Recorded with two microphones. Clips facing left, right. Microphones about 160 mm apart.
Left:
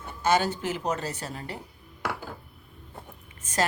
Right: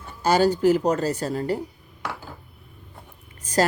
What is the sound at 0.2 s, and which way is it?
A woman's voice, 35° right (ahead or behind).